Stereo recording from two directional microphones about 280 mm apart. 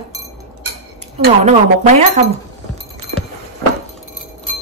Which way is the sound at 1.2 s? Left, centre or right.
Right.